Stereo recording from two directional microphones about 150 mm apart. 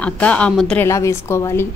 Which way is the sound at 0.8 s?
20° left (ahead or behind).